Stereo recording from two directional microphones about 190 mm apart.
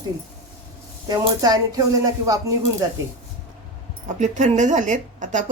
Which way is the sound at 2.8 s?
20° right (ahead or behind).